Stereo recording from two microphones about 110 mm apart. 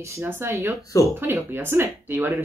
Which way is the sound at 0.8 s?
30° left (ahead or behind).